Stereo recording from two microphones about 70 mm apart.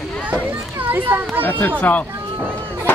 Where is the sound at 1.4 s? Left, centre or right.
Left.